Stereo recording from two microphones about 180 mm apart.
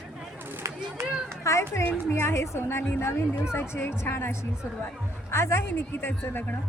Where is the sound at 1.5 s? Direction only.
15° left (ahead or behind).